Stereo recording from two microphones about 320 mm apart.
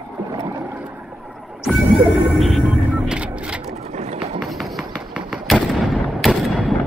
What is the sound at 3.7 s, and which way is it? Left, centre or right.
Boat, right.